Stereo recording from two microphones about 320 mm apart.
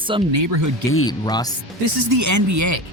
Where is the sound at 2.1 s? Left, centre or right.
Right.